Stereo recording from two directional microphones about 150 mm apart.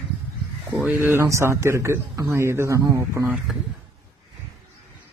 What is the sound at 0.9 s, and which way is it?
A man's voice, 15° right (ahead or behind).